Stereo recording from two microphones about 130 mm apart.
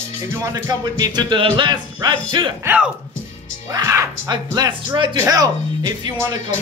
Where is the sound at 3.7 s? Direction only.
25° right (ahead or behind).